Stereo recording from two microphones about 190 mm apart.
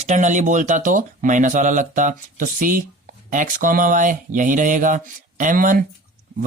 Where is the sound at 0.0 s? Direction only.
40° right (ahead or behind).